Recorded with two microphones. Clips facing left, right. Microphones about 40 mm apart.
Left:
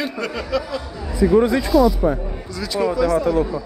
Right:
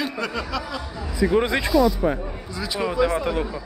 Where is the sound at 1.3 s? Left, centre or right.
Right.